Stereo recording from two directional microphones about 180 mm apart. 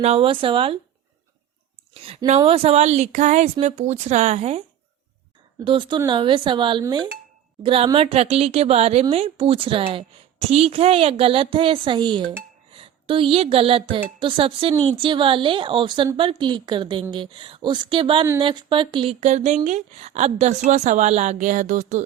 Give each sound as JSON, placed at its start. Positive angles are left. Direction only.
{"t": 0.0, "sound": "a woman's voice", "side_deg": -30}
{"t": 1.9, "sound": "speech", "side_deg": -35}
{"t": 5.6, "sound": "a woman's voice", "side_deg": -30}